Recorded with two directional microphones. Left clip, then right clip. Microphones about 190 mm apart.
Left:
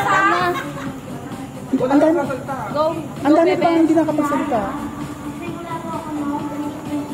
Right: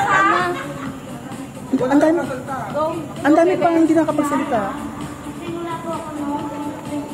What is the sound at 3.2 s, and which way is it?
Speech, 15° right (ahead or behind).